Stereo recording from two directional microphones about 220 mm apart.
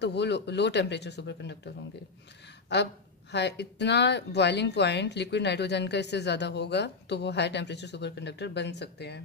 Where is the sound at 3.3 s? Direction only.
50° left (ahead or behind).